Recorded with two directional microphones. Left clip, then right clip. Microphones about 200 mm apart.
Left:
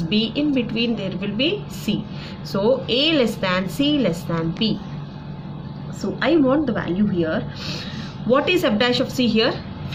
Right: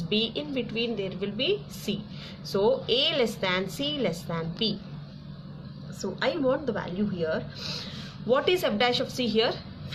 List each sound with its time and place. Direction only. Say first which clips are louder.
0.1 s a woman's voice: left 7 dB; 20° right (ahead or behind)
6.1 s a woman's voice: left 8 dB; 20° right (ahead or behind)